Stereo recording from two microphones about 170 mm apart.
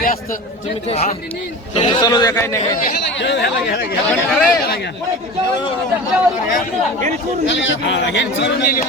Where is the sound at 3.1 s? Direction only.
90° left; by 4.8 s 70° left (ahead or behind).